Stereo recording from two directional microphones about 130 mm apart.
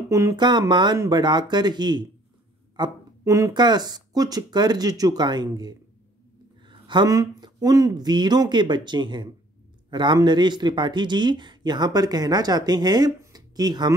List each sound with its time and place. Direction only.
0.1 s speech: 25° right (ahead or behind)